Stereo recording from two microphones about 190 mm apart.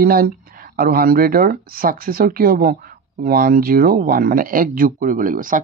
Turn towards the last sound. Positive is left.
turn(degrees=-45)  # may be behind; listen again after turning